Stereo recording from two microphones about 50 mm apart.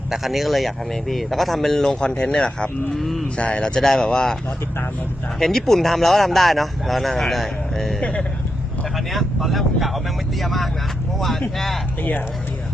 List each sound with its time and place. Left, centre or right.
0.1 s speech: centre
3.0 s speech: centre
3.3 s speech: left
3.8 s speech: centre
5.4 s speech: centre